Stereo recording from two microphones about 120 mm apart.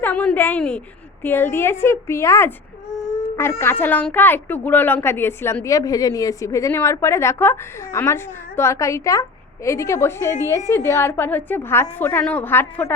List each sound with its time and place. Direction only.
0.0 s a woman's voice: 15° left (ahead or behind)
3.2 s a sound: 20° left (ahead or behind)
3.6 s a woman's voice: 20° left (ahead or behind)